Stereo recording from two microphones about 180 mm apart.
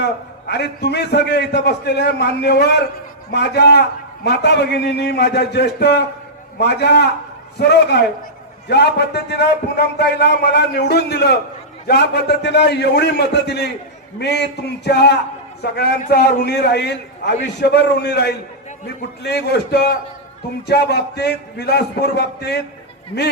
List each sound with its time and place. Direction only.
0.0 s a man's voice: 70° left (ahead or behind)